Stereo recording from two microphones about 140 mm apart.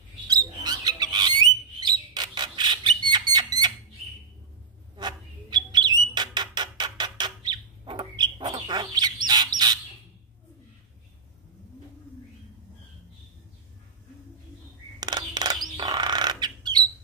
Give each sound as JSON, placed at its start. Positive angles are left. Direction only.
{"t": 0.3, "sound": "bird", "side_deg": -30}
{"t": 4.9, "sound": "bird", "side_deg": -30}
{"t": 15.0, "sound": "bird", "side_deg": -30}